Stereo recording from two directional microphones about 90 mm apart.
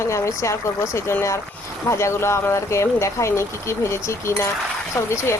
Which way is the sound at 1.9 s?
30° left (ahead or behind).